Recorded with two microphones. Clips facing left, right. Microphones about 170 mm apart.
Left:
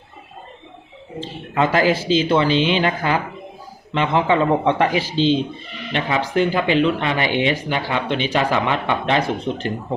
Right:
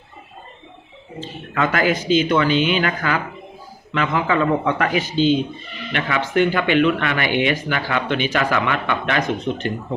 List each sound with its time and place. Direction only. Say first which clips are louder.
1.2 s speech: left 2 dB; 30° left (ahead or behind)